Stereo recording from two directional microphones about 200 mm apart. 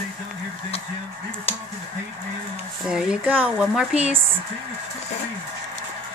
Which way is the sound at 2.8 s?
5° right (ahead or behind).